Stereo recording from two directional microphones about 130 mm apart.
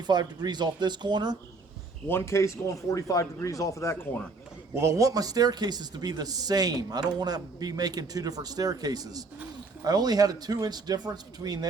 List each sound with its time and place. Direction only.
0.1 s speech: 35° right (ahead or behind)
2.0 s speech: 20° left (ahead or behind)
4.8 s speech: 25° right (ahead or behind)